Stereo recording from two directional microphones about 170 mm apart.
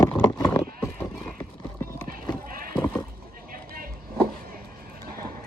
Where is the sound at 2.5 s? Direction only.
55° right (ahead or behind).